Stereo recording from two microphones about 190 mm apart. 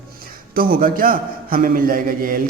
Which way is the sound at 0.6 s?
50° right (ahead or behind).